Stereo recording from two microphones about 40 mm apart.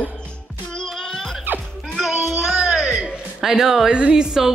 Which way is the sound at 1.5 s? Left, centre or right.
Right.